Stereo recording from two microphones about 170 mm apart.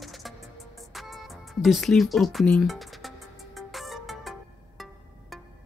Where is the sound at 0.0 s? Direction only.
Centre (ahead or behind).